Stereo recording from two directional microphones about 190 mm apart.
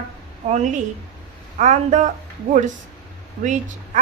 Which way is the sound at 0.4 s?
40° right (ahead or behind).